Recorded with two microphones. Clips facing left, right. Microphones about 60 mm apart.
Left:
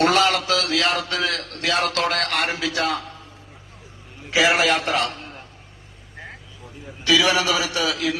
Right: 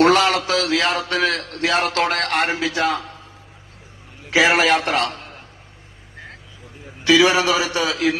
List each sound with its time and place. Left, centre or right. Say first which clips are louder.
0.0 s a sound: right 3 dB; right
0.4 s a man's voice: right 2 dB; right
4.3 s a man's voice: right 3 dB; right
7.1 s a man's voice: right 4 dB; right